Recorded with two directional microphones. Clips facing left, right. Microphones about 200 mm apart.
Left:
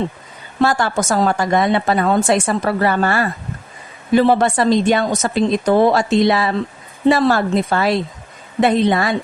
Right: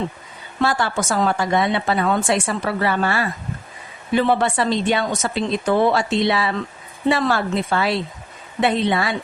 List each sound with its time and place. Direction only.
0.6 s a woman's voice: 45° left (ahead or behind)